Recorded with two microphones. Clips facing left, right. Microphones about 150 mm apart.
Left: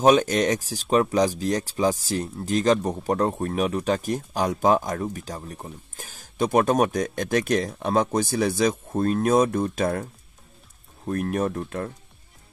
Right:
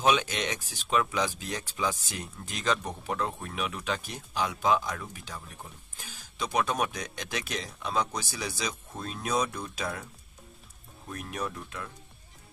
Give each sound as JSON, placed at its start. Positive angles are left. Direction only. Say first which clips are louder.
{"t": 0.0, "sound": "speech", "louder": "left 9 dB", "side_deg": 40}
{"t": 11.1, "sound": "speech", "louder": "left 11 dB", "side_deg": 50}